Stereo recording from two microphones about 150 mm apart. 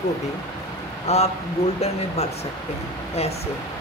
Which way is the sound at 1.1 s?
45° left (ahead or behind).